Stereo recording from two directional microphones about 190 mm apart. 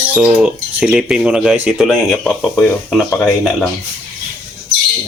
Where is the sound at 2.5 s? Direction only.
15° left (ahead or behind).